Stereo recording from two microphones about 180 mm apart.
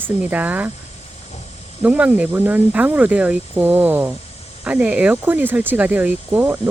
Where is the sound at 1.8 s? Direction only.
10° right (ahead or behind).